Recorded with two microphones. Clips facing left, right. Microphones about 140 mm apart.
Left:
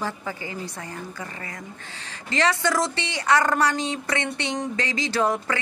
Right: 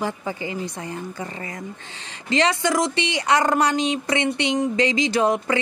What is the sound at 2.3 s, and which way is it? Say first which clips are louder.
A woman's voice: right 3 dB; 20° right (ahead or behind).